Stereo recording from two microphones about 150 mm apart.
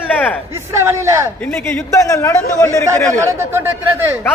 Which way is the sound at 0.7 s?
20° right (ahead or behind).